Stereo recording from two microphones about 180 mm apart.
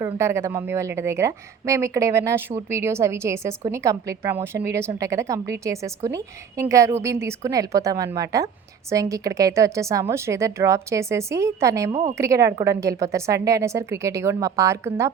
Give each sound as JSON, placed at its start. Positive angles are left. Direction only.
{"t": 0.0, "sound": "a woman's voice", "side_deg": -15}